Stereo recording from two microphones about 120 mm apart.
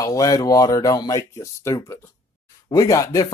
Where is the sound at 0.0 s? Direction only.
30° left (ahead or behind).